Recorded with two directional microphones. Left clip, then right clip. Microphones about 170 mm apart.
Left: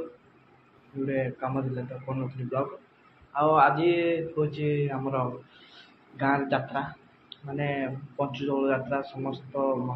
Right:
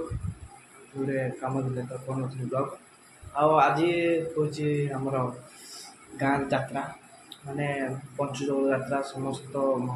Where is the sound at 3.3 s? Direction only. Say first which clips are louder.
Even; 25° right (ahead or behind).